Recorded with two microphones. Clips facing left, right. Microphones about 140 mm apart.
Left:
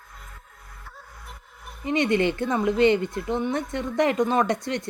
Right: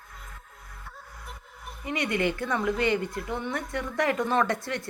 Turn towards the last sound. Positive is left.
turn(degrees=20)  # may be behind; listen again after turning